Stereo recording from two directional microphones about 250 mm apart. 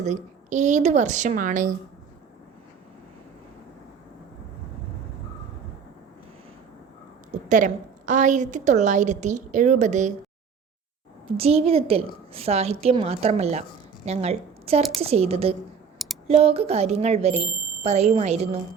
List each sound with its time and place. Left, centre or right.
0.0 s a woman's voice: right
7.3 s a woman's voice: right
11.3 s a woman's voice: right